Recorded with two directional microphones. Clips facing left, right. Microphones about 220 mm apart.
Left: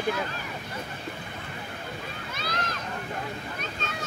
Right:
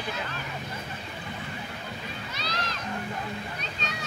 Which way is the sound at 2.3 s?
50° left (ahead or behind).